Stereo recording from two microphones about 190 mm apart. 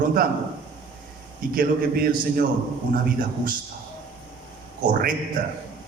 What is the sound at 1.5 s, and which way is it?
Speech, 50° right (ahead or behind).